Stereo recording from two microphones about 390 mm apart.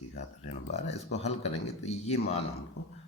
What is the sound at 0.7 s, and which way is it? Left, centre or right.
Speech, centre.